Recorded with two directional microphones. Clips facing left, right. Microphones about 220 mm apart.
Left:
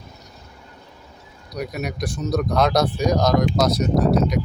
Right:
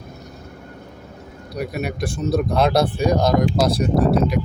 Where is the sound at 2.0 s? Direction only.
30° right (ahead or behind).